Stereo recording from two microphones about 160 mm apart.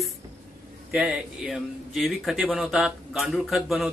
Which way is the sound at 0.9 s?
5° right (ahead or behind).